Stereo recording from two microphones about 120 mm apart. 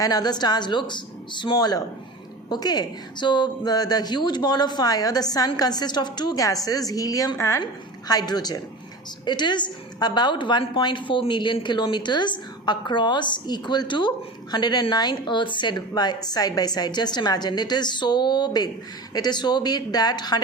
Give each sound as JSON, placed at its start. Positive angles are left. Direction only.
{"t": 0.0, "sound": "a woman's voice", "side_deg": 35}